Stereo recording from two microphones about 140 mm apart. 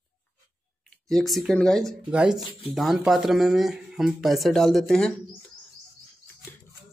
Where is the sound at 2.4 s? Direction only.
40° left (ahead or behind).